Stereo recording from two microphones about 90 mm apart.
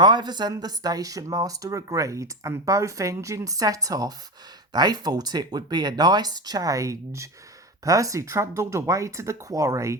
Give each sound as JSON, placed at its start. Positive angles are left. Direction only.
{"t": 0.0, "sound": "speech", "side_deg": -55}